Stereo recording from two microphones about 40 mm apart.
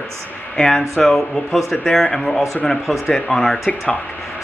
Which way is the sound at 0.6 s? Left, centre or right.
Centre.